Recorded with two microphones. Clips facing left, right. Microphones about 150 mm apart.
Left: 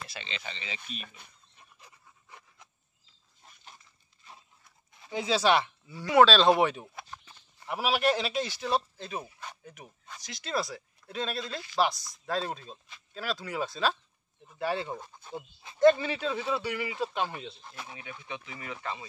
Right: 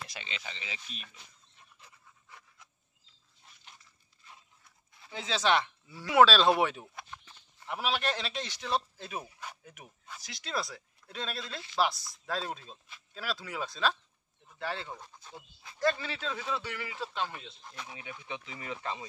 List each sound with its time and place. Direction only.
0.1 s speech: 10° right (ahead or behind)
1.0 s speech: 55° left (ahead or behind)
1.8 s pant: 10° left (ahead or behind)
4.9 s speech: 15° left (ahead or behind)
8.9 s speech: 5° right (ahead or behind)
14.5 s speech: 15° left (ahead or behind)
17.8 s speech: 15° right (ahead or behind)